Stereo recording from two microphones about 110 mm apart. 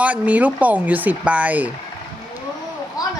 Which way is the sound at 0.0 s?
15° right (ahead or behind).